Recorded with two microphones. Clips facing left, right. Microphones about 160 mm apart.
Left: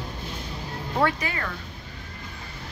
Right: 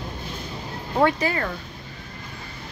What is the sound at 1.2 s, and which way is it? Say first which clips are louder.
Speech: right 7 dB; 35° right (ahead or behind).